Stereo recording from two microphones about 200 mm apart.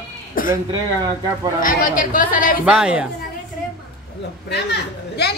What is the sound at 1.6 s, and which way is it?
Speech, 40° left (ahead or behind).